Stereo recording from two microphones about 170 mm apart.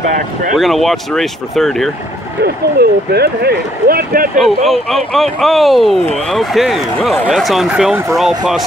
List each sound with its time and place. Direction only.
0.6 s speech: centre (ahead or behind)
2.4 s speech: 70° right (ahead or behind)
4.4 s speech: centre (ahead or behind)